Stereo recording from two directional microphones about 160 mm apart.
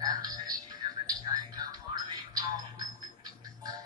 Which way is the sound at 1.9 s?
25° right (ahead or behind).